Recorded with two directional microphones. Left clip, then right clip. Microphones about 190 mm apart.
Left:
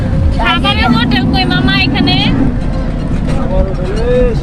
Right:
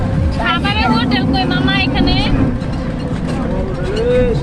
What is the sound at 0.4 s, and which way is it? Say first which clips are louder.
Vehicle: left 4 dB; 55° left (ahead or behind).